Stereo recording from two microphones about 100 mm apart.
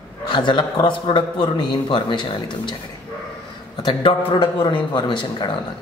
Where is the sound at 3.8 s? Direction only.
50° left (ahead or behind).